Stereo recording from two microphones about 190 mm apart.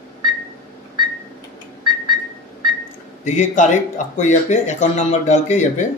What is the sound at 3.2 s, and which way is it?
Speech, 40° left (ahead or behind).